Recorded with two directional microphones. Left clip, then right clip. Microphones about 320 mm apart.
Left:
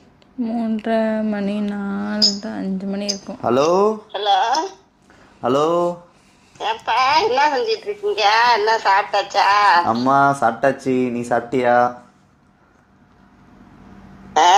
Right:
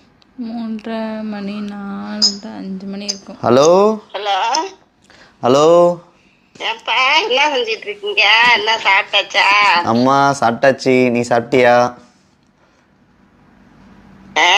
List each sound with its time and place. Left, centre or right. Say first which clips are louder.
0.4 s speech: left 3 dB; centre
3.4 s speech: right 6 dB; right
5.4 s a woman's voice: right 8 dB; right
9.9 s speech: right 3 dB; right